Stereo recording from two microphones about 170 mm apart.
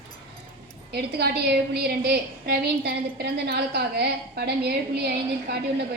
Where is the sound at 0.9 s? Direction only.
70° right (ahead or behind).